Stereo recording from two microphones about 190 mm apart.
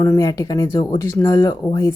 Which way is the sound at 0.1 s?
15° left (ahead or behind).